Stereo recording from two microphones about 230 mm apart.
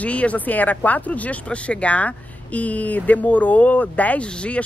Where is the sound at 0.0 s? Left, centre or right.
Centre.